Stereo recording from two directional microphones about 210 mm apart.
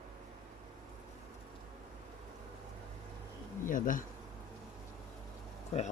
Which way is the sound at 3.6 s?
40° left (ahead or behind).